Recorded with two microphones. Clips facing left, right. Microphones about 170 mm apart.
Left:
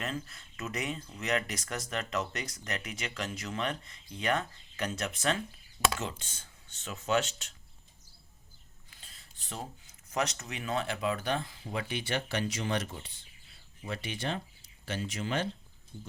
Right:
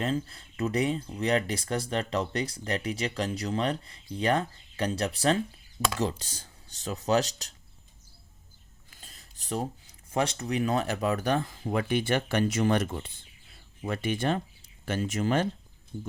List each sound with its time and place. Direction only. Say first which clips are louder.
0.0 s speech: right 8 dB; 30° right (ahead or behind)
8.9 s speech: right 4 dB; 40° right (ahead or behind)